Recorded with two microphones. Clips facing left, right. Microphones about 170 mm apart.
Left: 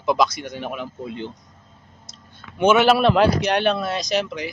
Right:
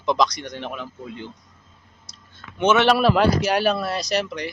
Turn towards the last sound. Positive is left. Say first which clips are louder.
# left 1 dB
turn(degrees=0)  # may be behind; listen again after turning